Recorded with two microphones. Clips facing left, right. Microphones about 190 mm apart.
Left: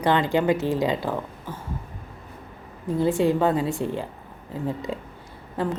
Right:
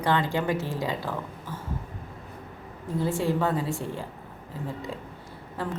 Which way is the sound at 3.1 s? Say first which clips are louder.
Left 5 dB; 20° left (ahead or behind).